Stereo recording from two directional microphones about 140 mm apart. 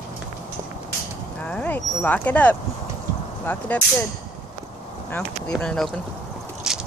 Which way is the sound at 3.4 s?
10° left (ahead or behind).